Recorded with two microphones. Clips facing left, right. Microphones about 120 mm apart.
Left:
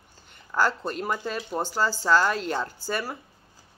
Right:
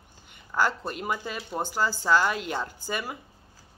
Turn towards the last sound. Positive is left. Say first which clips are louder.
# left 2 dB
turn(degrees=-15)  # may be behind; listen again after turning